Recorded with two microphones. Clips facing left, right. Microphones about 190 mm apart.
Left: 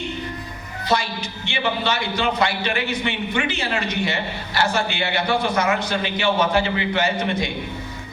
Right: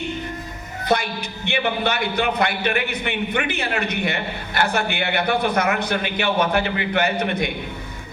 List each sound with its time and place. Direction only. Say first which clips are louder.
0.9 s a man's voice: right 1 dB; 60° right (ahead or behind)